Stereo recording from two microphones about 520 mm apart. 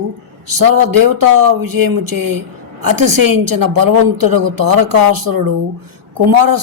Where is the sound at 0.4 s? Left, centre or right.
Right.